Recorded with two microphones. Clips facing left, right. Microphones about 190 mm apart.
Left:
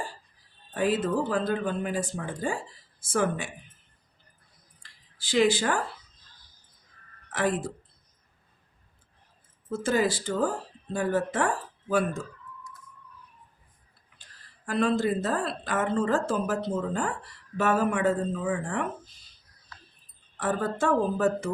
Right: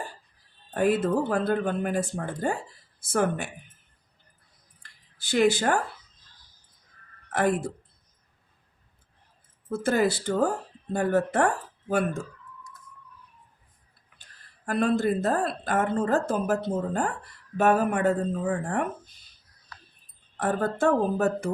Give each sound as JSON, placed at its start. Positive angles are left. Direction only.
{"t": 0.7, "sound": "a woman's voice", "side_deg": -50}
{"t": 5.3, "sound": "a woman's voice", "side_deg": -55}
{"t": 7.3, "sound": "speech", "side_deg": -55}
{"t": 9.6, "sound": "a woman's voice", "side_deg": -60}
{"t": 14.7, "sound": "a woman's voice", "side_deg": -55}
{"t": 20.4, "sound": "a woman's voice", "side_deg": -55}